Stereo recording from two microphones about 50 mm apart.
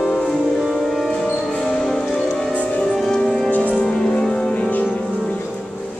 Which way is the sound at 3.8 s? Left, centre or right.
Centre.